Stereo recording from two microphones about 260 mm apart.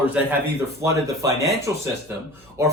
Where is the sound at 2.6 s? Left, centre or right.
Centre.